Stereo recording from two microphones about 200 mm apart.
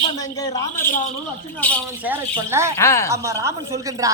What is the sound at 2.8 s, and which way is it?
Speech, 15° left (ahead or behind).